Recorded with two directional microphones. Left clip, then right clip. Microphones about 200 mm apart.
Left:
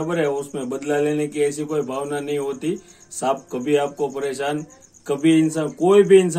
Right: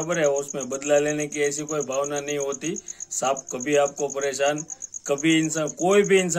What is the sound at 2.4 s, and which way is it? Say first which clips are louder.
Speech: left 3 dB; 35° right (ahead or behind).